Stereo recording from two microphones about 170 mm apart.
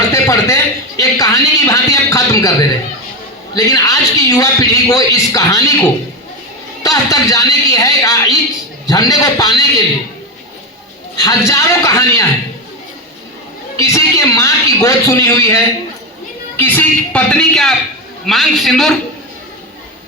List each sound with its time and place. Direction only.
0.1 s a man's voice: 15° left (ahead or behind)
3.5 s a man's voice: 20° left (ahead or behind)
6.8 s a man's voice: 20° left (ahead or behind)
11.2 s a man's voice: 20° left (ahead or behind)
13.7 s a man's voice: 15° left (ahead or behind); by 18.9 s centre (ahead or behind)